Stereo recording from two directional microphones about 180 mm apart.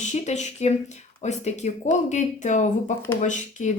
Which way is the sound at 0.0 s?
40° left (ahead or behind).